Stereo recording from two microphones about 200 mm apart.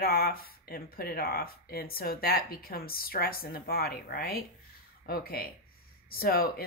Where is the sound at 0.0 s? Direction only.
50° left (ahead or behind).